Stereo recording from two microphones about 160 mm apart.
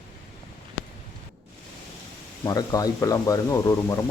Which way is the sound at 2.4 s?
25° left (ahead or behind).